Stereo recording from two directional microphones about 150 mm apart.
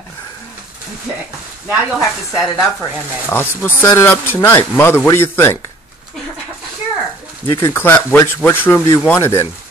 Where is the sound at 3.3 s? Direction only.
15° left (ahead or behind).